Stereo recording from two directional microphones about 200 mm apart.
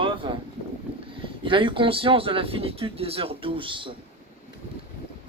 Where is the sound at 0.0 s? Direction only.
25° right (ahead or behind).